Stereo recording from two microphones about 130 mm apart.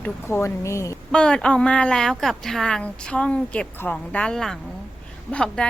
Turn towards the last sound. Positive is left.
turn(degrees=5)  # may be behind; listen again after turning